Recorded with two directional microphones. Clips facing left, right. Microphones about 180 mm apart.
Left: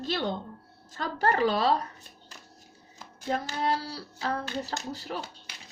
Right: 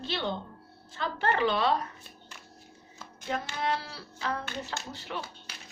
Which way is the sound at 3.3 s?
40° left (ahead or behind).